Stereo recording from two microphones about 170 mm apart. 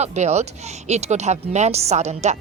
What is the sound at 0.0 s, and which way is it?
Speech, 40° right (ahead or behind).